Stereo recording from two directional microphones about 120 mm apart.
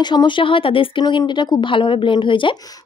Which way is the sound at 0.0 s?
40° left (ahead or behind).